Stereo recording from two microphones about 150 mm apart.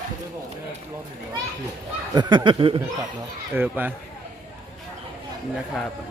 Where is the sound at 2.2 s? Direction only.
30° right (ahead or behind).